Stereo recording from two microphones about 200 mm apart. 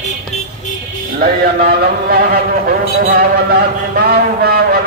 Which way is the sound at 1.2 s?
50° right (ahead or behind).